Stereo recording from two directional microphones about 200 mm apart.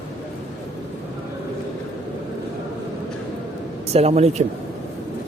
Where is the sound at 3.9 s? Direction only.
30° right (ahead or behind).